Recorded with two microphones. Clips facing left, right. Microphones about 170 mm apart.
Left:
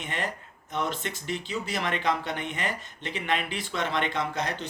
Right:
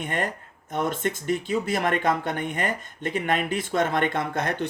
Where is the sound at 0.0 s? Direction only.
50° right (ahead or behind).